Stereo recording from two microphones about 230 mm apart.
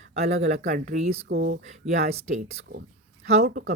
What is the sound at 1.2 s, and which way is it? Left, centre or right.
Speech, right.